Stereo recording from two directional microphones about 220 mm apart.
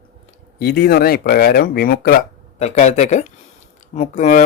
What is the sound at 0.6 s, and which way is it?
Speech, 45° left (ahead or behind).